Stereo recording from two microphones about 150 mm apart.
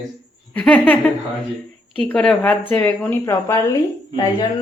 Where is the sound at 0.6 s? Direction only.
10° left (ahead or behind).